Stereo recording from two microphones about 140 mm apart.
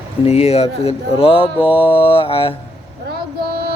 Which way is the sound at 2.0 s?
40° left (ahead or behind).